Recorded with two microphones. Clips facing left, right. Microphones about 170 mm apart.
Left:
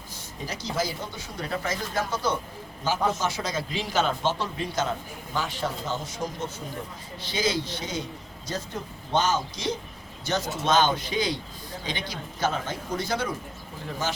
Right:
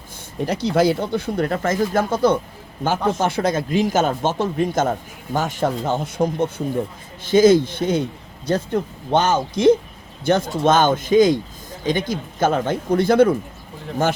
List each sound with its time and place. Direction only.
0.3 s a man's voice: 65° right (ahead or behind)